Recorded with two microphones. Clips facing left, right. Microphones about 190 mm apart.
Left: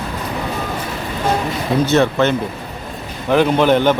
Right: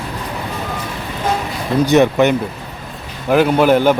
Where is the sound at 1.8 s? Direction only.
15° right (ahead or behind).